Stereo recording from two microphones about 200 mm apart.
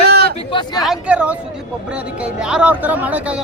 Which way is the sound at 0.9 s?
5° right (ahead or behind).